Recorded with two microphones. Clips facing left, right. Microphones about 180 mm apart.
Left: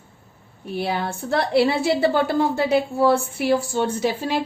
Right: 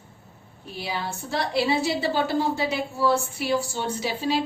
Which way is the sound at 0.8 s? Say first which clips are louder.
Left 6 dB; 55° left (ahead or behind).